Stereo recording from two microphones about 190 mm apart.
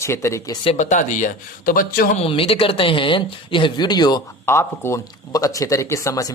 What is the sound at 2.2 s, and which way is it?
Speech, 30° left (ahead or behind).